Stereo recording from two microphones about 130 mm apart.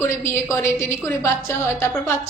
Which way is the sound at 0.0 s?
20° left (ahead or behind).